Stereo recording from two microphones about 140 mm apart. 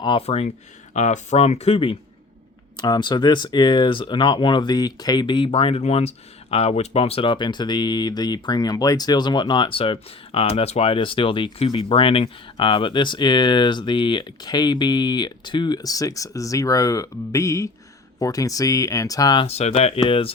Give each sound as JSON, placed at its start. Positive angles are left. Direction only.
{"t": 0.0, "sound": "speech", "side_deg": 40}
{"t": 2.7, "sound": "speech", "side_deg": 30}
{"t": 19.5, "sound": "speech", "side_deg": 50}